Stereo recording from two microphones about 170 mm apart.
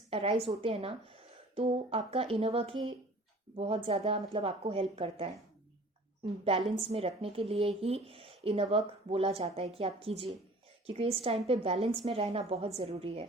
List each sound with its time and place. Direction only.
0.1 s speech: 35° right (ahead or behind)
6.7 s speech: 35° right (ahead or behind)